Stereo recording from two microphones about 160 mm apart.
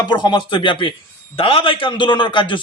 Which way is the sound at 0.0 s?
25° left (ahead or behind).